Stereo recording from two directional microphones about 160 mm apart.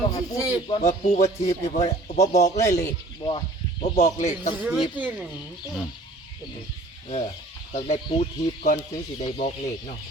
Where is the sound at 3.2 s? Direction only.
30° left (ahead or behind).